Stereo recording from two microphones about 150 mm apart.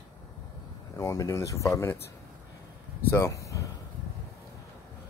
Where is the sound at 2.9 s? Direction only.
15° left (ahead or behind).